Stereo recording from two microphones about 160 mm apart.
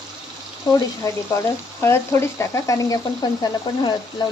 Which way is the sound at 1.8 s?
15° left (ahead or behind).